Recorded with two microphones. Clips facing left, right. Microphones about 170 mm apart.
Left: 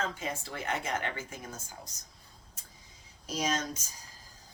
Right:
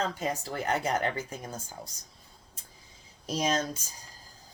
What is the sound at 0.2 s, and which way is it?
Speech, 40° right (ahead or behind).